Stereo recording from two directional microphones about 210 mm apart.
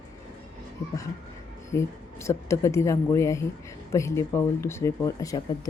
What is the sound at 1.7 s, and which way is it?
Speech, 15° left (ahead or behind).